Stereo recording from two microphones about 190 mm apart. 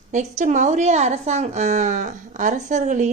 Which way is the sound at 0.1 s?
40° right (ahead or behind).